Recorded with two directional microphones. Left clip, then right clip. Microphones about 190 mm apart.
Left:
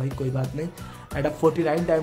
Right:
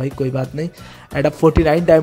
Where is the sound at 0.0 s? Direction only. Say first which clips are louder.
Right 8 dB; 35° right (ahead or behind).